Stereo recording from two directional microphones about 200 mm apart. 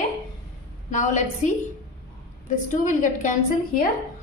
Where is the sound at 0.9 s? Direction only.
40° left (ahead or behind).